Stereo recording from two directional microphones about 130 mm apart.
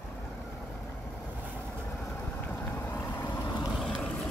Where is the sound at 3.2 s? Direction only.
30° left (ahead or behind).